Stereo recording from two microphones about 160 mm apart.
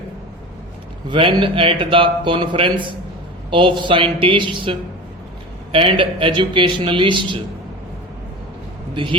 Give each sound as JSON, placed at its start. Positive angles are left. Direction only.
{"t": 1.1, "sound": "a man's voice", "side_deg": -30}
{"t": 9.0, "sound": "a man's voice", "side_deg": -30}